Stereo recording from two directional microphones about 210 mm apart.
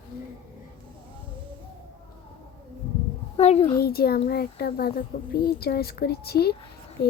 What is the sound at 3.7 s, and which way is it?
A child's voice, 45° left (ahead or behind).